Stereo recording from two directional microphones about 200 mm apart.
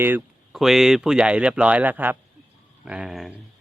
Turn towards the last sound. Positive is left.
turn(degrees=0)  # may be behind; listen again after turning